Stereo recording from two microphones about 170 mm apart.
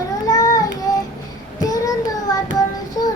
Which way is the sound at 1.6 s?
20° left (ahead or behind).